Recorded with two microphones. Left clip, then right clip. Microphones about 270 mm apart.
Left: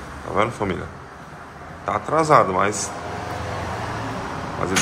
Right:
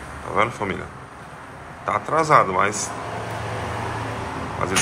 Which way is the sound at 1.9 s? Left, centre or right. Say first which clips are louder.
Left 1 dB; centre.